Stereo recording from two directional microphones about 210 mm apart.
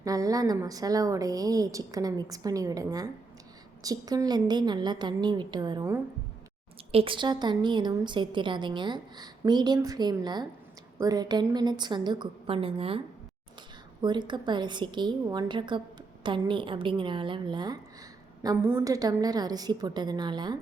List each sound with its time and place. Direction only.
0.0 s a woman's voice: 15° right (ahead or behind)
14.0 s a woman's voice: 20° right (ahead or behind)